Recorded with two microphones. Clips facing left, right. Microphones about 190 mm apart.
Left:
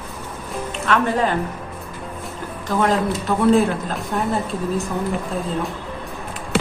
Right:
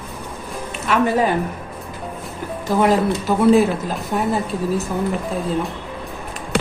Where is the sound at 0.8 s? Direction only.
10° right (ahead or behind).